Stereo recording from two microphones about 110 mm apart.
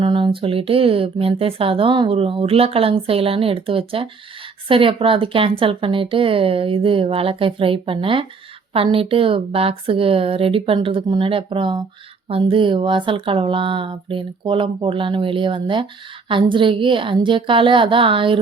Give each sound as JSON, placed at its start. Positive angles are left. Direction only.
{"t": 0.0, "sound": "speech", "side_deg": -50}